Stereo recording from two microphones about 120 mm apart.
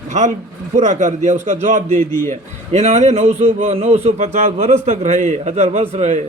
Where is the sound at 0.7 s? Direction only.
85° right.